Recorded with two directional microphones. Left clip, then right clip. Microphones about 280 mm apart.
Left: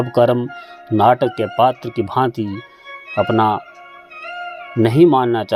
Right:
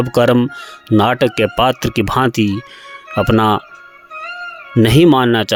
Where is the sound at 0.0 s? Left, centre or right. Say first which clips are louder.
Right 2 dB; right.